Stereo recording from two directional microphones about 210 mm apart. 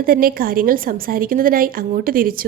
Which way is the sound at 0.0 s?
45° right (ahead or behind).